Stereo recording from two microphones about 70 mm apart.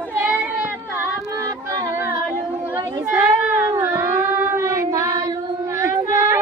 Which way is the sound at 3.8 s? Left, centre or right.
Right.